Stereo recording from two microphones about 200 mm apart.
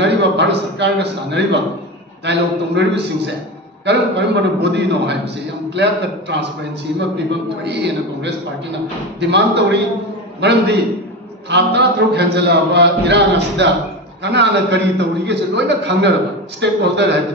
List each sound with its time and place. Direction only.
0.0 s a man's voice: 60° right (ahead or behind)
7.6 s a man's voice: 60° right (ahead or behind)